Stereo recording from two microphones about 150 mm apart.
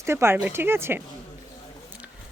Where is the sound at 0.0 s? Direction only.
15° right (ahead or behind).